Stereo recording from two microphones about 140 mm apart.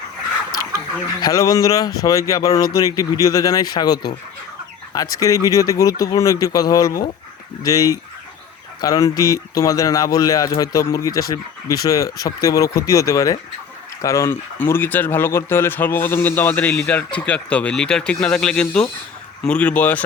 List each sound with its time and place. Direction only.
1.2 s speech: 25° left (ahead or behind)